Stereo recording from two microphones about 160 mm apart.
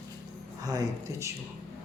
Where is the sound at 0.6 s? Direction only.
25° right (ahead or behind).